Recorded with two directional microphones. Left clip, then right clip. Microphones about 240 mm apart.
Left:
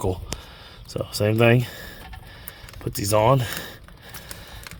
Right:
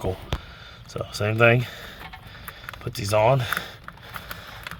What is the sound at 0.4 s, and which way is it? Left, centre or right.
Speech, left.